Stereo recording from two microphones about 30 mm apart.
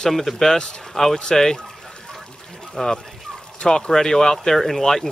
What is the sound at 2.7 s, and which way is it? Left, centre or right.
Speech, centre.